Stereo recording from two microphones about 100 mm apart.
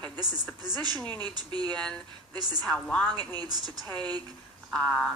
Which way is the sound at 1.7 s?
10° left (ahead or behind).